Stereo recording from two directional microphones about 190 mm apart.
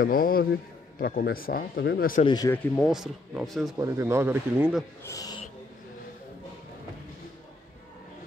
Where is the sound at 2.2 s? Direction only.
20° left (ahead or behind).